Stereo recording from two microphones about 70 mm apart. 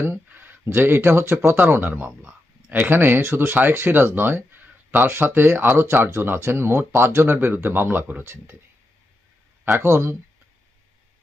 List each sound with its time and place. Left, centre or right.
0.0 s speech: right; by 2.7 s centre
2.7 s speech: right
9.7 s speech: right